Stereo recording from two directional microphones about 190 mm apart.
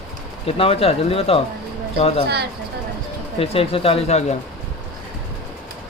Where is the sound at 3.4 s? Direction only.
30° left (ahead or behind).